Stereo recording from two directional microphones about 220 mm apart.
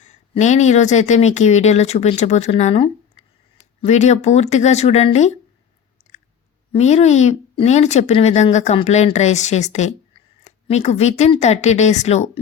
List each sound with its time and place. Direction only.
0.0 s speech: 30° left (ahead or behind)
6.7 s speech: 30° left (ahead or behind)